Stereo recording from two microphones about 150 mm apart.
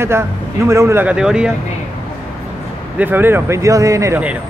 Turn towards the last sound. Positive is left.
turn(degrees=-20)  # may be behind; listen again after turning